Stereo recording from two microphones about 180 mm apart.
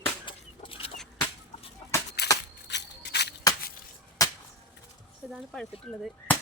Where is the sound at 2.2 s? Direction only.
65° left (ahead or behind).